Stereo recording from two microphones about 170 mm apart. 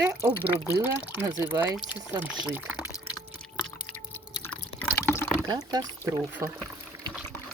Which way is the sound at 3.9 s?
10° left (ahead or behind).